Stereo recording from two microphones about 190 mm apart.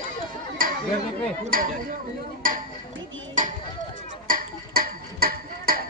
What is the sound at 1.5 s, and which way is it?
Speech, 50° right (ahead or behind).